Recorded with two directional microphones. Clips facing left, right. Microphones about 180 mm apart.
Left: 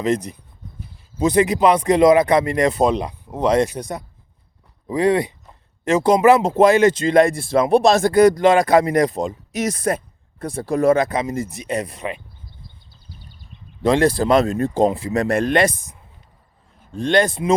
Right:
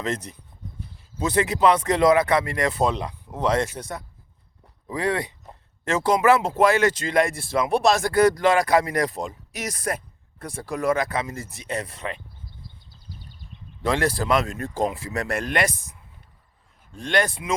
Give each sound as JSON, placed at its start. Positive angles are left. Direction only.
{"t": 0.0, "sound": "speech", "side_deg": 15}
{"t": 13.8, "sound": "speech", "side_deg": 20}